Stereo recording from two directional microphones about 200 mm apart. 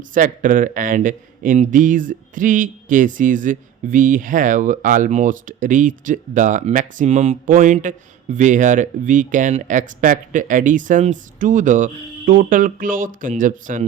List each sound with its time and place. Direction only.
0.1 s speech: 40° right (ahead or behind)